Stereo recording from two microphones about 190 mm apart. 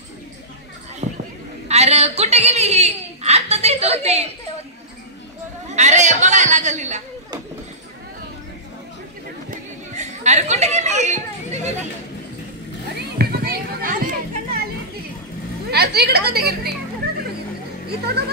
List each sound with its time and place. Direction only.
1.0 s a sound: 35° right (ahead or behind)
1.7 s a woman's voice: 35° right (ahead or behind)
5.7 s a man's voice: 40° right (ahead or behind)
9.5 s chatter: 40° right (ahead or behind)
13.2 s children playing: 55° right (ahead or behind)
15.7 s a woman's voice: 55° right (ahead or behind)
17.8 s speech: 55° right (ahead or behind)